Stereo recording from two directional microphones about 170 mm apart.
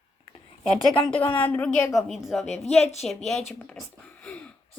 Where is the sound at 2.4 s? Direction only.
40° left (ahead or behind).